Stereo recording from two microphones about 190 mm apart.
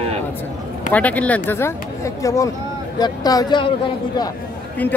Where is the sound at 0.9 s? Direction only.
10° left (ahead or behind); by 4.3 s 25° left (ahead or behind).